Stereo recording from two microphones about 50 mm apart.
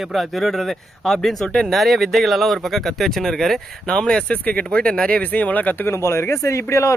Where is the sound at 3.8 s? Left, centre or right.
Centre; by 5.7 s left.